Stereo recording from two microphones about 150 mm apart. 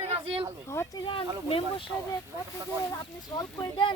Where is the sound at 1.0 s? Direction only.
35° left (ahead or behind).